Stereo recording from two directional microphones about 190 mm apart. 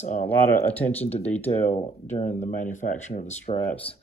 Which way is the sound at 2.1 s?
40° left (ahead or behind).